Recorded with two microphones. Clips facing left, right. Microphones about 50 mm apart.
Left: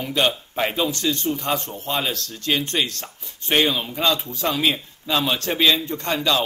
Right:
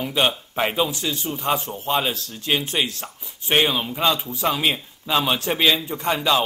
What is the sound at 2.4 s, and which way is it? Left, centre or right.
Speech, centre.